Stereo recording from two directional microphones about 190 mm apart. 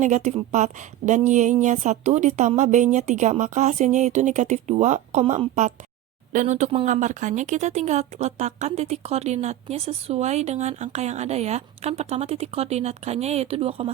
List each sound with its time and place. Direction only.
0.0 s speech: 40° right (ahead or behind)